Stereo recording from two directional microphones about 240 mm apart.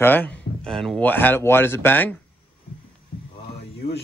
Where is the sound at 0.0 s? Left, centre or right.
Centre.